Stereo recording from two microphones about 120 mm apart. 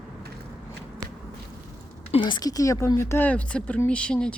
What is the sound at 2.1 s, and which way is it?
Speech, 40° left (ahead or behind).